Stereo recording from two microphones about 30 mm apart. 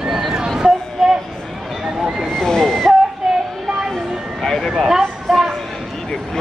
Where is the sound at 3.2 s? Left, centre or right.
Centre.